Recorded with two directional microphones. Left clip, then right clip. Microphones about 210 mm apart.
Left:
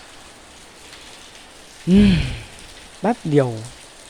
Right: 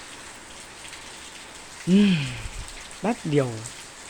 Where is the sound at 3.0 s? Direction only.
15° left (ahead or behind).